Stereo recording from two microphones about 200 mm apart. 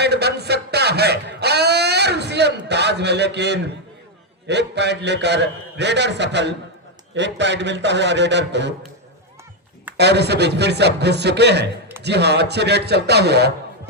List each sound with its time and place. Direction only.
0.0 s a sound: 55° right (ahead or behind)
4.4 s a man's voice: 60° right (ahead or behind)
10.0 s a man's voice: 55° right (ahead or behind)